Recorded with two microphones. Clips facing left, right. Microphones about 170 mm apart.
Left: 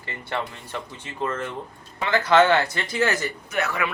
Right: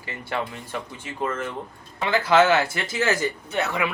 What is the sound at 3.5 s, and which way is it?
Speech, 25° right (ahead or behind).